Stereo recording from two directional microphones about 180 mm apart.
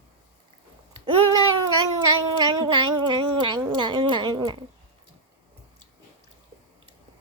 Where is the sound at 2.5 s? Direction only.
25° right (ahead or behind).